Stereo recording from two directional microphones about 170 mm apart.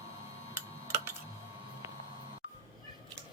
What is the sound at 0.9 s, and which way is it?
Typing, 15° right (ahead or behind).